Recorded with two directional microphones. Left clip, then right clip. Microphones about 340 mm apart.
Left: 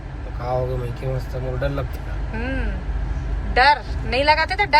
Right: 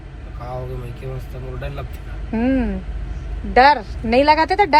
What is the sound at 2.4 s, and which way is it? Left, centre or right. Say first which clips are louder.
A woman's voice: right 8 dB; centre.